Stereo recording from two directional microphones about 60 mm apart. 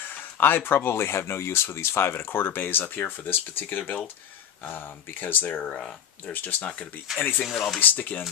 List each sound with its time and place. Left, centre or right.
0.1 s speech: left
7.4 s speech: centre
7.8 s speech: left